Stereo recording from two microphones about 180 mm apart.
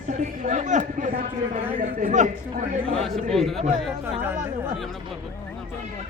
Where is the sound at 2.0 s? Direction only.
40° right (ahead or behind).